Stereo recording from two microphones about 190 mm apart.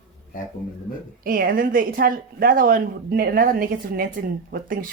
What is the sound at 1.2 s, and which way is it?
A woman's voice, 50° right (ahead or behind).